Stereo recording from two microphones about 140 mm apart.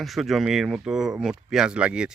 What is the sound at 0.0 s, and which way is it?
Speech, centre (ahead or behind).